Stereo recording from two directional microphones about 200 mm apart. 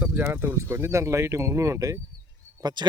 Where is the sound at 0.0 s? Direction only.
10° right (ahead or behind).